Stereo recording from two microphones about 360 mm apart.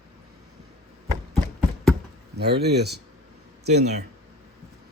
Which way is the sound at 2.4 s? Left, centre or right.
Right.